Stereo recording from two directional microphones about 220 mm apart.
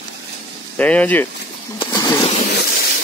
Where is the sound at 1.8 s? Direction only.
20° left (ahead or behind).